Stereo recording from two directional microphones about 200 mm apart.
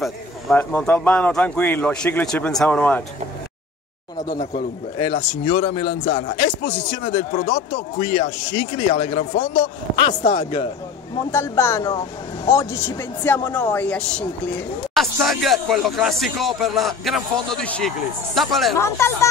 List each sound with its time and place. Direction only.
0.0 s speech: 5° left (ahead or behind)
4.3 s speech: 35° left (ahead or behind)
11.3 s a man's voice: 15° left (ahead or behind)
18.8 s speech: 15° left (ahead or behind)